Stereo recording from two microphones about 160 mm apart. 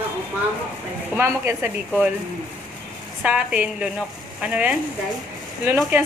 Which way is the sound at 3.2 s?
10° right (ahead or behind).